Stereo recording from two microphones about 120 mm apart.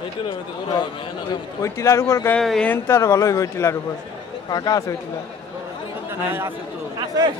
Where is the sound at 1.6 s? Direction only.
25° left (ahead or behind).